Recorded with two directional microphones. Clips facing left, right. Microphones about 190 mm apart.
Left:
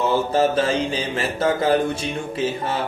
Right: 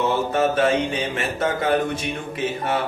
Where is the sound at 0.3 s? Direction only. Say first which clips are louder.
Right 1 dB; 30° left (ahead or behind).